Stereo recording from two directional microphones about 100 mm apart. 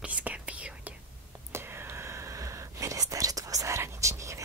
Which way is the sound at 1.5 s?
25° right (ahead or behind).